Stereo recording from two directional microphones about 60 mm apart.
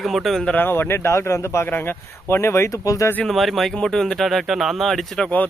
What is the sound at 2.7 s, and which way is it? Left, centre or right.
Speech, left.